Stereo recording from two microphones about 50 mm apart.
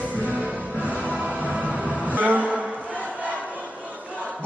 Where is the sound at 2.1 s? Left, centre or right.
Right.